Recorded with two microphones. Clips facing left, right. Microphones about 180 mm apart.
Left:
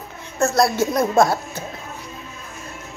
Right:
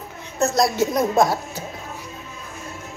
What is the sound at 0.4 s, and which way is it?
A woman's voice, 20° right (ahead or behind).